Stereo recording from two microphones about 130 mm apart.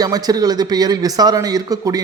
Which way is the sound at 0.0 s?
30° right (ahead or behind).